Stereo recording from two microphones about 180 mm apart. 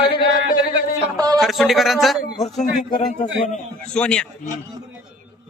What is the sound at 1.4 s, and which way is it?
A man's voice, centre (ahead or behind).